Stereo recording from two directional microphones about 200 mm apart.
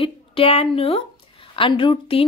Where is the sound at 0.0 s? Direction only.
25° left (ahead or behind).